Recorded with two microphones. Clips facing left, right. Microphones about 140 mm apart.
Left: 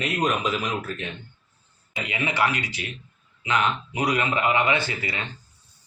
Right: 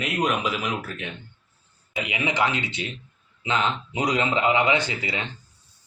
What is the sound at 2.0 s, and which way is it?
Speech, 15° right (ahead or behind).